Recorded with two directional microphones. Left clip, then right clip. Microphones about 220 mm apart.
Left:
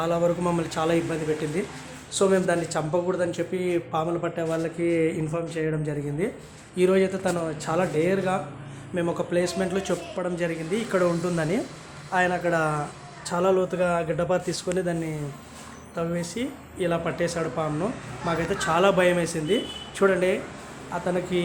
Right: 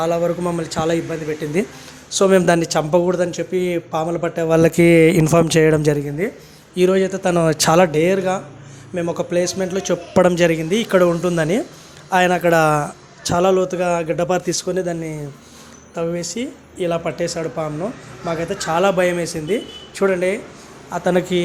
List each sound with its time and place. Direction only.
0.0 s speech: 20° right (ahead or behind)
2.1 s speech: 35° right (ahead or behind)
4.5 s speech: 50° right (ahead or behind)
6.2 s speech: 20° right (ahead or behind)
7.3 s speech: 45° right (ahead or behind)
8.0 s speech: 30° right (ahead or behind)
10.2 s a man's voice: 40° right (ahead or behind); by 20.4 s 20° right (ahead or behind)
20.9 s a man's voice: 35° right (ahead or behind)